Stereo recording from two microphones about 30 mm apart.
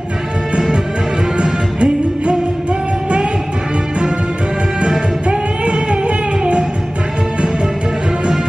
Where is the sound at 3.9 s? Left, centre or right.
Right.